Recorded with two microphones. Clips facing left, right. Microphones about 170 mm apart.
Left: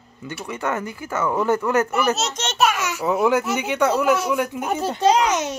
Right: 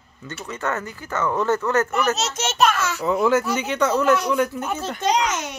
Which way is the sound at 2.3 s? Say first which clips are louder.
Right 1 dB; 5° right (ahead or behind).